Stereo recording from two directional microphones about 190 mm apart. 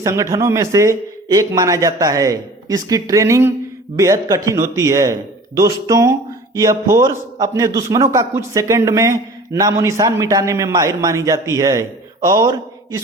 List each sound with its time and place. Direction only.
0.0 s a man's voice: 15° right (ahead or behind)